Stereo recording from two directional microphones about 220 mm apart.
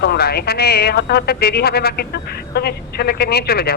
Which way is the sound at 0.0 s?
45° left (ahead or behind).